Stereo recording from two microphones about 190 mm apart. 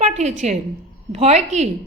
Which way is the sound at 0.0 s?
35° right (ahead or behind).